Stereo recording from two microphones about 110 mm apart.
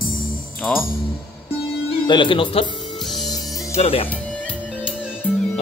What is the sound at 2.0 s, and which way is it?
Speech, 50° left (ahead or behind).